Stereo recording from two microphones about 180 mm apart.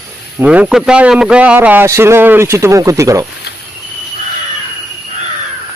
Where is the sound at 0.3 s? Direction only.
10° right (ahead or behind).